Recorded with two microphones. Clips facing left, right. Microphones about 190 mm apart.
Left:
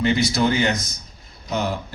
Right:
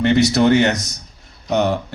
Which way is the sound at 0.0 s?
70° right (ahead or behind).